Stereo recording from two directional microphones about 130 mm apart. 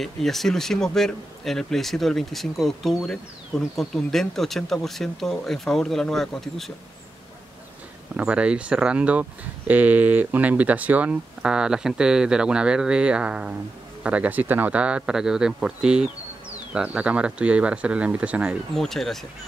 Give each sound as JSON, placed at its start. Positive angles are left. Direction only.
{"t": 0.0, "sound": "speech", "side_deg": 0}
{"t": 8.2, "sound": "speech", "side_deg": -10}
{"t": 18.8, "sound": "speech", "side_deg": 0}